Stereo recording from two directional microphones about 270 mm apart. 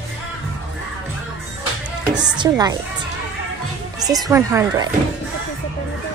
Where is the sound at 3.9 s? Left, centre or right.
Centre.